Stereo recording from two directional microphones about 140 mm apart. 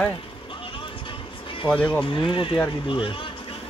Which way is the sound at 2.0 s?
35° left (ahead or behind).